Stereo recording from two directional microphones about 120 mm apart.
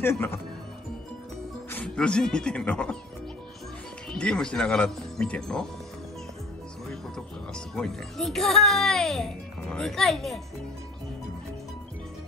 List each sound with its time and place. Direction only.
0.0 s speech: 20° left (ahead or behind)
1.7 s speech: 10° left (ahead or behind)
4.1 s speech: 5° left (ahead or behind)
6.9 s speech: 5° left (ahead or behind)